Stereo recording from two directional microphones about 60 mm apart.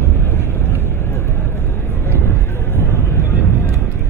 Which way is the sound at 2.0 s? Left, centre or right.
Left.